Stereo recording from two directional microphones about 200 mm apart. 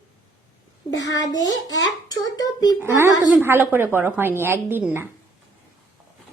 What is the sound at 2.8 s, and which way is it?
Speech, 15° right (ahead or behind).